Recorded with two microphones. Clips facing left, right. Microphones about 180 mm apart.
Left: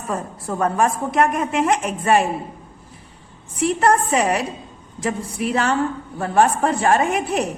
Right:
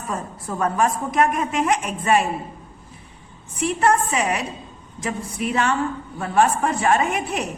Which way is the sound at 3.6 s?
35° left (ahead or behind).